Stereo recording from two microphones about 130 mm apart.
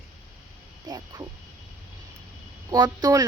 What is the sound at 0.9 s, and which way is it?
Speech, 30° right (ahead or behind).